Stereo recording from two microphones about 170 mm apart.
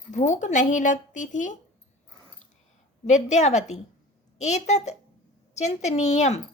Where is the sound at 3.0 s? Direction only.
45° left (ahead or behind).